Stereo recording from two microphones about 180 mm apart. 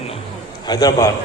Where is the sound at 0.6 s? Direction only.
20° left (ahead or behind).